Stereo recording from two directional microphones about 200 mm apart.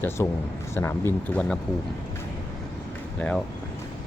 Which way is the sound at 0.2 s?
15° left (ahead or behind).